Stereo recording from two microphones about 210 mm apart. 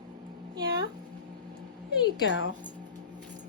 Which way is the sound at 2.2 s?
65° left (ahead or behind).